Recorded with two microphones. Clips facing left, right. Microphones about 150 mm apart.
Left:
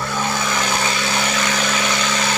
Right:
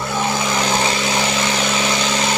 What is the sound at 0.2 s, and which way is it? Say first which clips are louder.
Vehicle: right 3 dB; 25° right (ahead or behind).